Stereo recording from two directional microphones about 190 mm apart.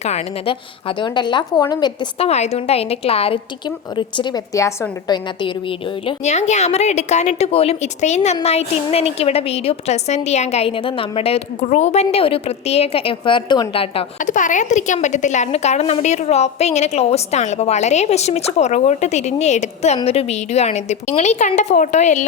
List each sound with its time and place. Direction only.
0.0 s a woman's voice: 35° left (ahead or behind)
14.2 s a woman's voice: 40° left (ahead or behind)